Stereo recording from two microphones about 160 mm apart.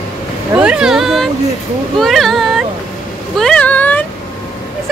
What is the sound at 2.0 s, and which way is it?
Child singing, centre (ahead or behind).